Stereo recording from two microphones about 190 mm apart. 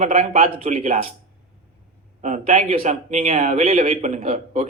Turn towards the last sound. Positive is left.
turn(degrees=-40)  # may be behind; listen again after turning